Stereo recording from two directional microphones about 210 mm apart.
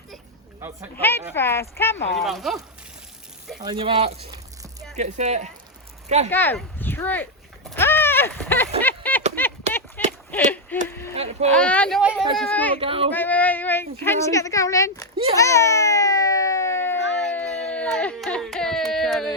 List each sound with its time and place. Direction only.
0.9 s speech: 10° left (ahead or behind)
2.1 s speech: centre (ahead or behind)
3.6 s speech: 20° right (ahead or behind)
6.3 s a sound: 10° left (ahead or behind)
10.7 s speech: 10° left (ahead or behind)
11.1 s speech: 30° right (ahead or behind)
11.5 s speech: 5° left (ahead or behind)
12.7 s speech: 25° right (ahead or behind)
13.1 s speech: 10° left (ahead or behind)
15.4 s baby cry: 15° left (ahead or behind)